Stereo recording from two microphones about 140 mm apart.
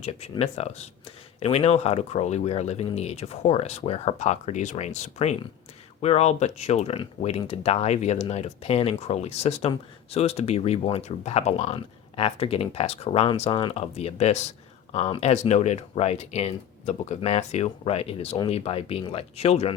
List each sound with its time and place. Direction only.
0.0 s speech: 45° left (ahead or behind)
13.5 s speech: 35° left (ahead or behind)
13.7 s speech: 50° left (ahead or behind)